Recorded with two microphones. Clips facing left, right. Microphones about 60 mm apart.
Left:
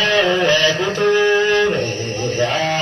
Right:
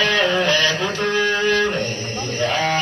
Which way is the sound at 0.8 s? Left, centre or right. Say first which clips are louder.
Left 5 dB; left.